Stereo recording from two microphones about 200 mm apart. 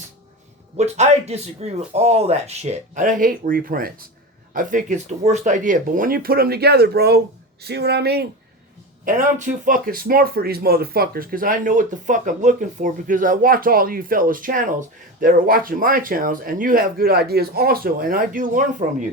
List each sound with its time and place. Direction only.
0.8 s speech: 35° right (ahead or behind); by 8.3 s 55° right (ahead or behind)
9.0 s speech: 40° right (ahead or behind)